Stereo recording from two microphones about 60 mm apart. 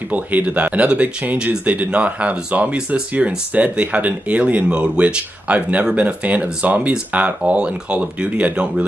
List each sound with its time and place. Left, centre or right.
0.1 s speech: right